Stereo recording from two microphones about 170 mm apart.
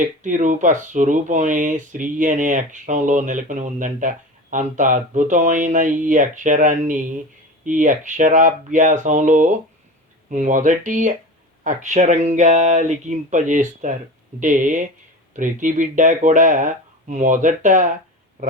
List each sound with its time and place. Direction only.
0.0 s speech: 50° right (ahead or behind)